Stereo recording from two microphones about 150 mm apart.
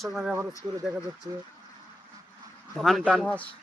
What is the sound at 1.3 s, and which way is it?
Speech, 20° right (ahead or behind).